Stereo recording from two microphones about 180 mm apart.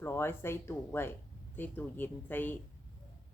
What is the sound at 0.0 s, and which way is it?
Speech, 10° left (ahead or behind).